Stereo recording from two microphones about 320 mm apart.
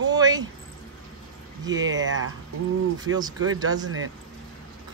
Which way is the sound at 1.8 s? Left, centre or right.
Right.